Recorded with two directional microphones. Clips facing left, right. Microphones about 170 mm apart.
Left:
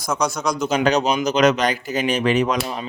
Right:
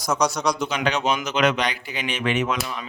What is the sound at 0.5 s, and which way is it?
Speech, 40° left (ahead or behind).